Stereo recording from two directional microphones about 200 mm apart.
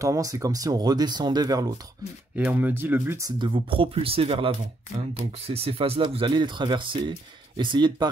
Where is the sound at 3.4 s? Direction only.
25° right (ahead or behind).